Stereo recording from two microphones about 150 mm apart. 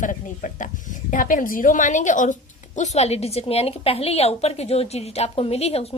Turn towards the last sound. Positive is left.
turn(degrees=45)  # may be behind; listen again after turning